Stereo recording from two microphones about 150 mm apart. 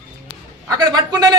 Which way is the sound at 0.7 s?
25° right (ahead or behind).